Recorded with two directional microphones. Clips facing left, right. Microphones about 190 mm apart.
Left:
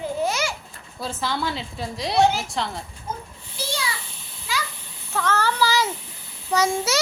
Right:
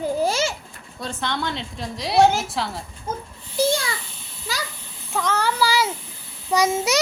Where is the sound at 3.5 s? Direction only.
50° right (ahead or behind).